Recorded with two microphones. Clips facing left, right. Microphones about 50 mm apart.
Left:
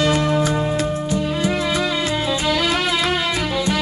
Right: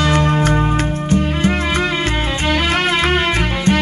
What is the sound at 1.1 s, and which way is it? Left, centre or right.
Music, right.